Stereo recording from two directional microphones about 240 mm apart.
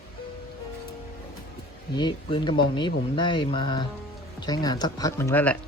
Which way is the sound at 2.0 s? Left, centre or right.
Centre.